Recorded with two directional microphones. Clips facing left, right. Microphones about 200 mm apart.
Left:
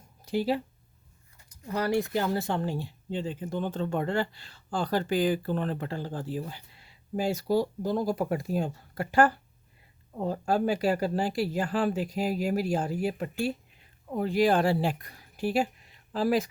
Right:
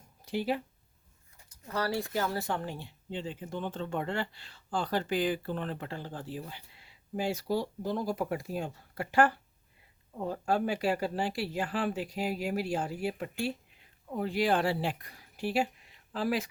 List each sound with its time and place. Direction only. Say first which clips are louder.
0.3 s speech: left 4 dB; 35° left (ahead or behind)
1.5 s speech: left 4 dB; 15° left (ahead or behind); by 16.5 s 40° left (ahead or behind)